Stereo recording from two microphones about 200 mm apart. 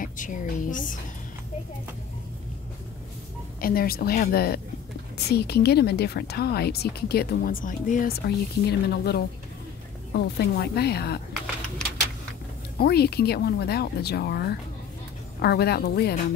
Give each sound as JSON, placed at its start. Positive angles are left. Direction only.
{"t": 0.0, "sound": "a woman's voice", "side_deg": 40}
{"t": 3.6, "sound": "speech", "side_deg": 50}
{"t": 8.6, "sound": "speech", "side_deg": 55}
{"t": 12.7, "sound": "speech", "side_deg": 50}